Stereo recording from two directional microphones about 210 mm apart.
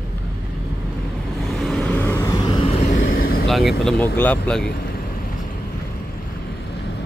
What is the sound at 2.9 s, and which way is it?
Vehicle, 40° left (ahead or behind).